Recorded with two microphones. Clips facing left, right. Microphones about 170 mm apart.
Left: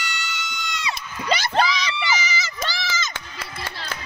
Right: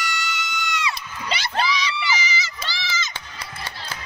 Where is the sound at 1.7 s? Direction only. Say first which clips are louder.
Even; 45° left (ahead or behind).